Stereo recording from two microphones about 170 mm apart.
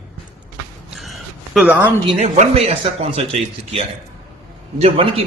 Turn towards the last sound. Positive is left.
turn(degrees=-35)  # may be behind; listen again after turning